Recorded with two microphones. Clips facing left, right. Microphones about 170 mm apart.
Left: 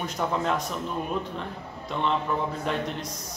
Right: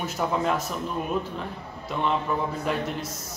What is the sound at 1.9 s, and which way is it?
Speech, 5° right (ahead or behind).